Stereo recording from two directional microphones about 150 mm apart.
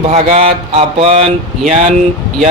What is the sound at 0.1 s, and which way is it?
Speech, 40° right (ahead or behind).